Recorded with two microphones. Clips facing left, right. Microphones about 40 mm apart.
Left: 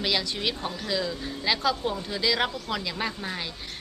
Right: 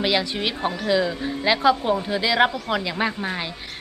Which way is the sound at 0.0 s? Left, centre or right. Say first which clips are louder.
Right 5 dB; right.